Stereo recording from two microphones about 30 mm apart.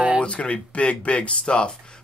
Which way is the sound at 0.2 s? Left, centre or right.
Left.